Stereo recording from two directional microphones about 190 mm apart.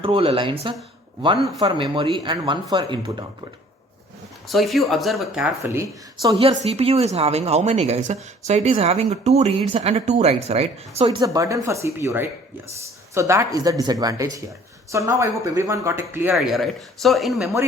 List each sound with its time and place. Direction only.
0.0 s speech: 30° right (ahead or behind)
4.4 s speech: centre (ahead or behind)
6.4 s speech: 30° right (ahead or behind)
11.2 s speech: 15° right (ahead or behind)
16.3 s speech: centre (ahead or behind)